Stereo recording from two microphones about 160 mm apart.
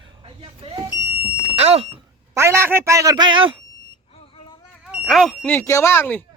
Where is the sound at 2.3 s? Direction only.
15° right (ahead or behind).